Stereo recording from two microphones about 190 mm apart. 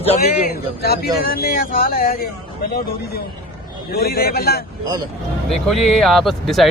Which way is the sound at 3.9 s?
55° left (ahead or behind).